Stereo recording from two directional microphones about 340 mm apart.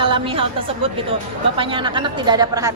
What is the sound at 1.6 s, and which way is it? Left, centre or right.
A woman's voice, centre.